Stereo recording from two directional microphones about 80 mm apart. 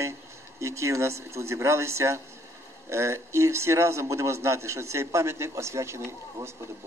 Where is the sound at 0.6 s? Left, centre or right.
Right.